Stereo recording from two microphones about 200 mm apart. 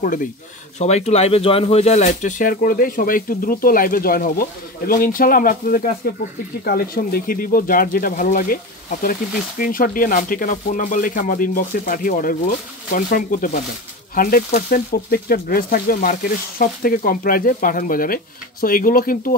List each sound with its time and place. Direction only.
0.7 s speech: 35° left (ahead or behind)
9.6 s speech: 45° left (ahead or behind)